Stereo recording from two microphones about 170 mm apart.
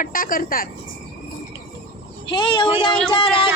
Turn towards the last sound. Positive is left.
turn(degrees=30)  # may be behind; listen again after turning